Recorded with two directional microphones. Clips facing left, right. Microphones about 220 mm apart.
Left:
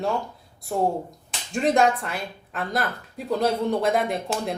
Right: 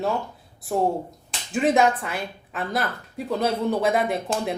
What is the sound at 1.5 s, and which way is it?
Speech, 5° right (ahead or behind).